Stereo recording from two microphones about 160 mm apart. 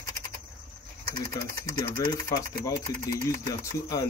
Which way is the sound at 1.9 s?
25° left (ahead or behind).